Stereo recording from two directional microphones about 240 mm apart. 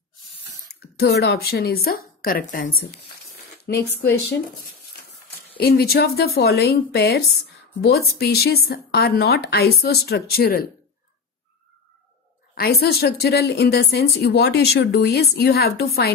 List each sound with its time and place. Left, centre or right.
0.7 s a woman's voice: left
5.6 s a woman's voice: left
12.5 s a woman's voice: left